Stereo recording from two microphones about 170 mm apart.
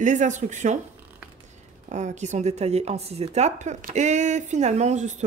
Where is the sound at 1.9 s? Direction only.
45° right (ahead or behind).